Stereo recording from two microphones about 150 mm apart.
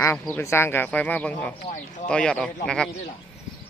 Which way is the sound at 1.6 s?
55° left (ahead or behind).